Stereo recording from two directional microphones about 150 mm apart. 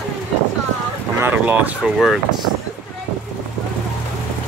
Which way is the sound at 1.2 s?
10° right (ahead or behind).